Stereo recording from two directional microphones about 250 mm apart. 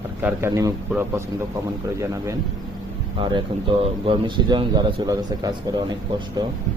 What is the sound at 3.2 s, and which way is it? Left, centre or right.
Speech, right.